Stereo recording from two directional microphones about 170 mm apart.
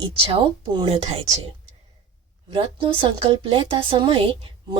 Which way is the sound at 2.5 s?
30° right (ahead or behind).